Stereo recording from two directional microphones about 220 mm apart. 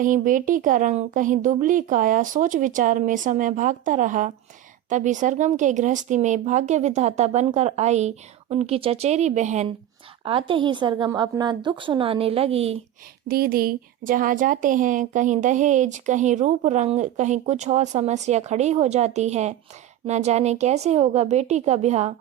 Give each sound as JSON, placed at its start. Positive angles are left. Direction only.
{"t": 0.0, "sound": "a woman's voice", "side_deg": -35}
{"t": 13.2, "sound": "a woman's voice", "side_deg": -45}